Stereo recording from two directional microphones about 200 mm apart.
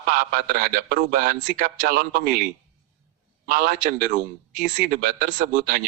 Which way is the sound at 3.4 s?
45° right (ahead or behind).